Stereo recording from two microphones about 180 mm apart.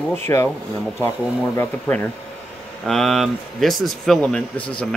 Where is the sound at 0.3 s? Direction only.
15° left (ahead or behind).